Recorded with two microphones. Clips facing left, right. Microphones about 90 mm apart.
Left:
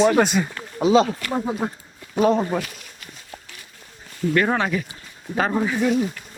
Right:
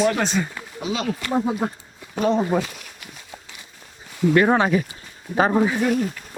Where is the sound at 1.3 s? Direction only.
10° right (ahead or behind).